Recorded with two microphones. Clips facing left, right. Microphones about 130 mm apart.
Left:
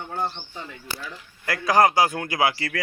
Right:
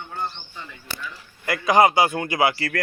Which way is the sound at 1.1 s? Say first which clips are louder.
Right 3 dB; 5° right (ahead or behind).